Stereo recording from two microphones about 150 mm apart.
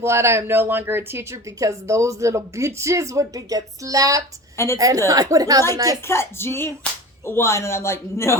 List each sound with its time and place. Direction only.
0.0 s speech: 15° right (ahead or behind)
4.5 s a woman's voice: 20° left (ahead or behind)
4.8 s speech: 25° right (ahead or behind)
6.1 s speech: 15° left (ahead or behind)